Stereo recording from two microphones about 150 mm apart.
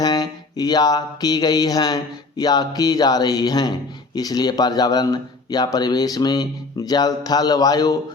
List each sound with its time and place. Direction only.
0.0 s mantra: 25° left (ahead or behind)